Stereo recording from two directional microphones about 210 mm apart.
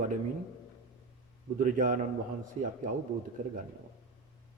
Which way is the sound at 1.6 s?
35° right (ahead or behind).